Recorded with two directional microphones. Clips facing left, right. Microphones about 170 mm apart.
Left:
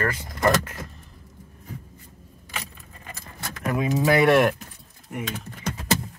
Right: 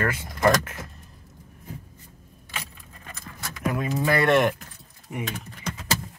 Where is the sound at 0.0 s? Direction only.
15° right (ahead or behind).